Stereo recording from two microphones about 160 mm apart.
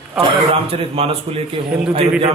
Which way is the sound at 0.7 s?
35° right (ahead or behind).